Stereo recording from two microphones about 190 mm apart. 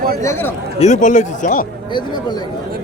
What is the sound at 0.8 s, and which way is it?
Speech, 40° left (ahead or behind).